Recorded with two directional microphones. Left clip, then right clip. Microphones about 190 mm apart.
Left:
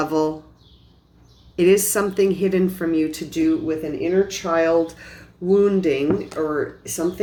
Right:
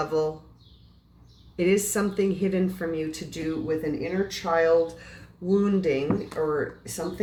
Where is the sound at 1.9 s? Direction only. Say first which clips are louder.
Left 7 dB; 50° left (ahead or behind).